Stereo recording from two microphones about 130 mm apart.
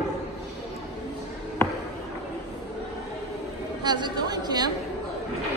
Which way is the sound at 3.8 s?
35° right (ahead or behind).